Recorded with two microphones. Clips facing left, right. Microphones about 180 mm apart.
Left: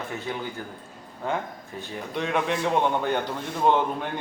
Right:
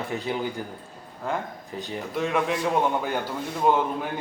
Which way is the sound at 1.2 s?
Centre (ahead or behind).